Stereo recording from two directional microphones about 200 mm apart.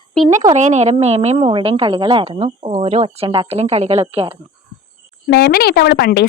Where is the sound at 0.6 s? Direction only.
35° right (ahead or behind).